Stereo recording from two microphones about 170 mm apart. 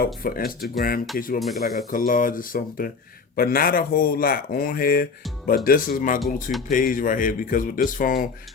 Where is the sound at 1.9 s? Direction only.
55° left (ahead or behind).